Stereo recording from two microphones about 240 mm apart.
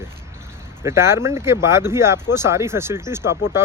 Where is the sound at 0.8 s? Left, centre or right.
Centre.